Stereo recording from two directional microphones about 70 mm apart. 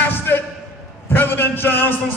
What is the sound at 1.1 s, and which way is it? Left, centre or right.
Speech, left.